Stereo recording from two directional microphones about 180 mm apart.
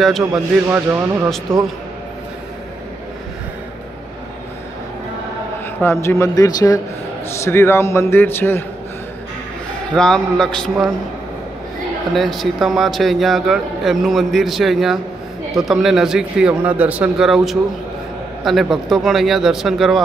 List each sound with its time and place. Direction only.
0.7 s speech: 15° right (ahead or behind)
5.8 s a man's voice: 15° left (ahead or behind)
9.9 s a man's voice: 5° left (ahead or behind)
12.1 s a man's voice: centre (ahead or behind)